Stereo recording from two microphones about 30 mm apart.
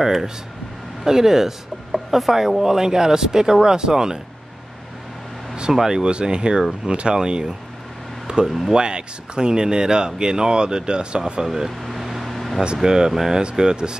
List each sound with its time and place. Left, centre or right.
0.0 s speech: centre
5.7 s speech: centre
5.9 s speech: right
8.5 s speech: centre
8.7 s speech: right
11.4 s speech: centre
11.8 s air conditioning: centre
12.3 s air conditioning: centre
12.8 s speech: right